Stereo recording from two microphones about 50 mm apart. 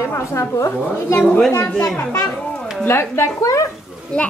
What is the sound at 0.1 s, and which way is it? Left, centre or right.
A woman's voice, left.